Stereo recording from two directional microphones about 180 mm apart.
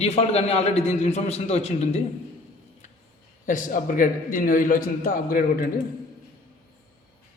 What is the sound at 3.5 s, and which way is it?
Speech, 45° left (ahead or behind).